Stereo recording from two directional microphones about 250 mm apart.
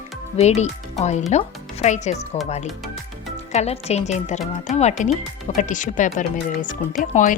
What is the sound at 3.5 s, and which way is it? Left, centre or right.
A woman's voice, left.